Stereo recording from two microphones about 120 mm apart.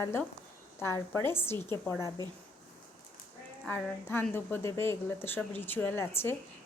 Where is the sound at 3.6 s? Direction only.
20° left (ahead or behind).